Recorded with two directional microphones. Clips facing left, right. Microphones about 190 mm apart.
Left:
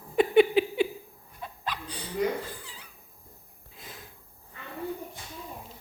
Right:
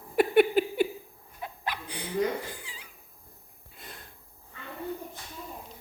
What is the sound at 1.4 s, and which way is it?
Dog, 10° right (ahead or behind).